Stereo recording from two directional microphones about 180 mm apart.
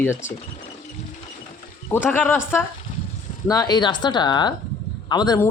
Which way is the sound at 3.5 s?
20° left (ahead or behind).